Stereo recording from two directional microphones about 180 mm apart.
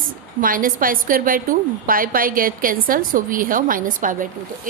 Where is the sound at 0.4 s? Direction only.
50° right (ahead or behind).